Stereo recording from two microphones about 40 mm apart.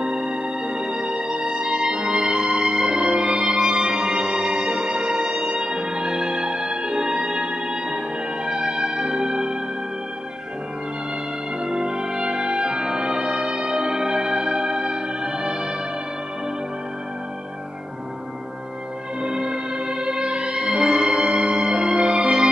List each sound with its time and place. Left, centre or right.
0.0 s music: right
11.6 s music: right
19.2 s music: right